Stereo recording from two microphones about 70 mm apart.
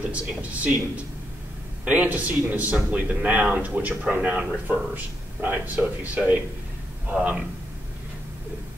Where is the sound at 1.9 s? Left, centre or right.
Right.